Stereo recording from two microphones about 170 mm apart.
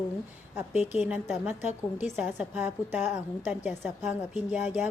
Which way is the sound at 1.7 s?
45° left (ahead or behind).